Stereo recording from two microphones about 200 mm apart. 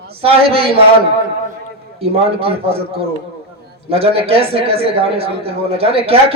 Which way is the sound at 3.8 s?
30° right (ahead or behind).